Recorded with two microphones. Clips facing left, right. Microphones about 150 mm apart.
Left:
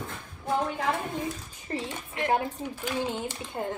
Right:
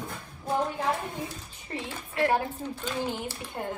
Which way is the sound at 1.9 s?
20° left (ahead or behind).